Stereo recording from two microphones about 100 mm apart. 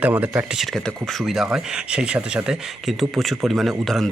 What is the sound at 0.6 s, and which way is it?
Speech, 5° left (ahead or behind).